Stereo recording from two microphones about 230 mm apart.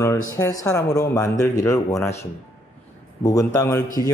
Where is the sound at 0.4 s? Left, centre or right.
Centre.